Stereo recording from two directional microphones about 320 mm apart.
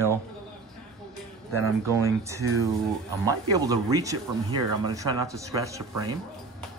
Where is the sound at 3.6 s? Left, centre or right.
Centre.